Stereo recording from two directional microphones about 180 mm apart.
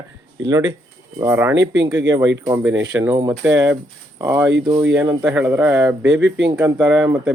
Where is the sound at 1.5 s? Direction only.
90° right.